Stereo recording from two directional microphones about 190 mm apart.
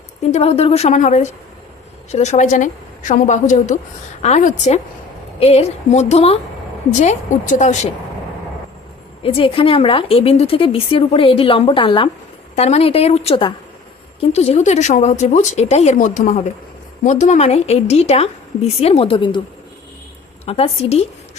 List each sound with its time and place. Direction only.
0.3 s a woman's voice: 35° left (ahead or behind)
9.2 s a woman's voice: 30° left (ahead or behind)
20.4 s a woman's voice: 30° left (ahead or behind)